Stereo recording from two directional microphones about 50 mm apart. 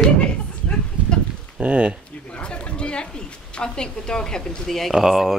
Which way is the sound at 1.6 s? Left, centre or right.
Right.